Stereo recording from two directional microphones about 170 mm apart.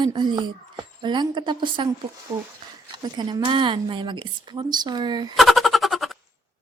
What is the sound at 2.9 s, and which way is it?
A woman's voice, 25° right (ahead or behind).